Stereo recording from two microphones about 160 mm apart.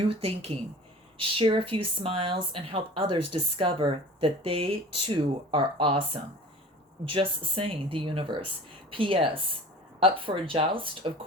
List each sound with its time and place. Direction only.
0.1 s speech: 35° right (ahead or behind)
7.1 s speech: 35° right (ahead or behind)